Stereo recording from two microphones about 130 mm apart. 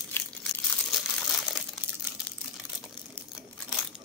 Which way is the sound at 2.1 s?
15° right (ahead or behind).